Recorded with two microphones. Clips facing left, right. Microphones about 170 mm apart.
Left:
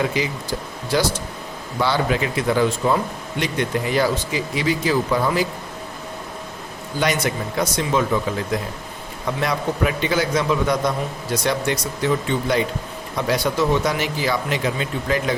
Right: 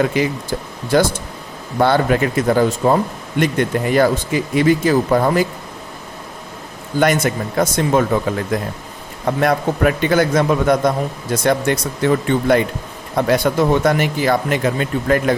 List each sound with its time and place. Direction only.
0.1 s speech: 55° right (ahead or behind)
7.0 s speech: 50° right (ahead or behind)
9.2 s speech: 55° right (ahead or behind)